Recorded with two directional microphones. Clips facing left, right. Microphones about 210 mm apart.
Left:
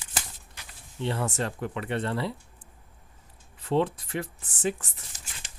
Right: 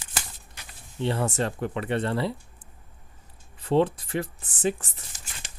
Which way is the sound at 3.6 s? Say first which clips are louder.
Right 3 dB; 35° right (ahead or behind).